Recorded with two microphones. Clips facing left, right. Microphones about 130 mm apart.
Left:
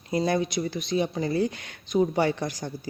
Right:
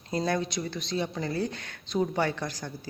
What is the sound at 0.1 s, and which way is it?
Speech, 10° left (ahead or behind).